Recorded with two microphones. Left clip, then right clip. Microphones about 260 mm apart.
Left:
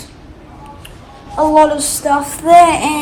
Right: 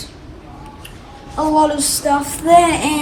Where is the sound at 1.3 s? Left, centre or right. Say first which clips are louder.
Left 5 dB; centre.